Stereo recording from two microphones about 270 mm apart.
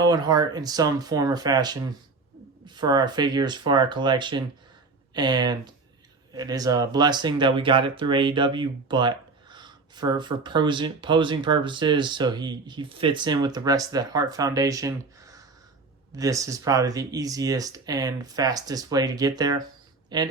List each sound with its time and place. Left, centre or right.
0.0 s speech: centre